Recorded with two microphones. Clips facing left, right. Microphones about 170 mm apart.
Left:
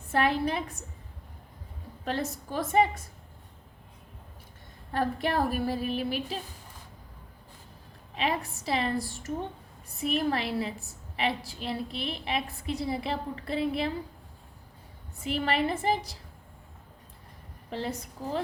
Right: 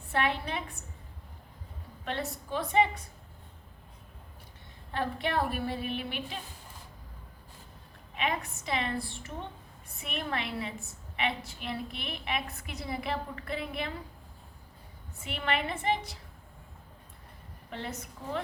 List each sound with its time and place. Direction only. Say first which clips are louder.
0.1 s a woman's voice: left 5 dB; 40° left (ahead or behind)
2.0 s a woman's voice: left 3 dB; 40° left (ahead or behind)
4.9 s a woman's voice: left 4 dB; 40° left (ahead or behind)
8.1 s a woman's voice: left 3 dB; 35° left (ahead or behind)
15.2 s a woman's voice: left 5 dB; 35° left (ahead or behind)
17.7 s a woman's voice: left 5 dB; 35° left (ahead or behind)